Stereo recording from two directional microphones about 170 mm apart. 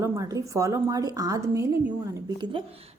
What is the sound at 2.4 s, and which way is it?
Speech, 30° right (ahead or behind).